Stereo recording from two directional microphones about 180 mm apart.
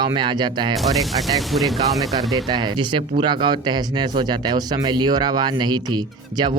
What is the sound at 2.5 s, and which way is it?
Speech, 25° right (ahead or behind).